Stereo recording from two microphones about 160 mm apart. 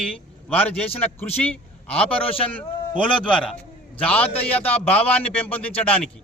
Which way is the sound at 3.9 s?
10° left (ahead or behind).